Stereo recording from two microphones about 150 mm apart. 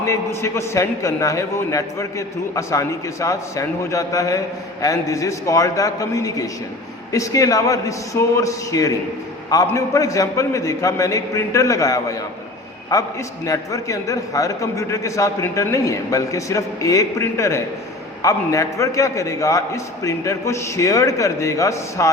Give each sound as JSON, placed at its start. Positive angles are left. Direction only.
{"t": 0.0, "sound": "a man's voice", "side_deg": 20}